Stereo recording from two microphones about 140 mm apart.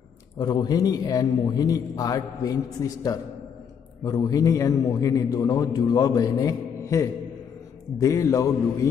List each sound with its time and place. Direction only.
0.4 s a man's voice: 30° left (ahead or behind)